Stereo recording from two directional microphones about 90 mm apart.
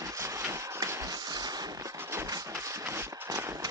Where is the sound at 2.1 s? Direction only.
30° right (ahead or behind).